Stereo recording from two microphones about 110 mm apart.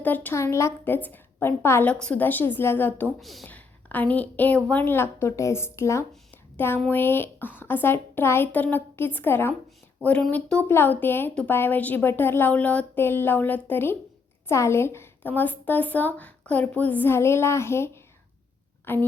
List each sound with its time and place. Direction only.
0.0 s a woman's voice: 15° left (ahead or behind)
0.3 s a woman's voice: 25° left (ahead or behind)
1.9 s a woman's voice: 10° left (ahead or behind)
3.2 s a woman's voice: centre (ahead or behind)
3.4 s a woman's voice: 15° left (ahead or behind)